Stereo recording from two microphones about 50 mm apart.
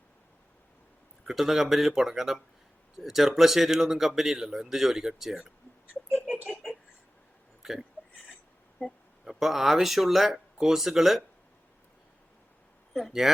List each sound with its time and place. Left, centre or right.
1.2 s speech: centre
6.5 s a sound: centre
7.6 s speech: centre
8.8 s speech: left
9.3 s speech: centre
12.9 s speech: centre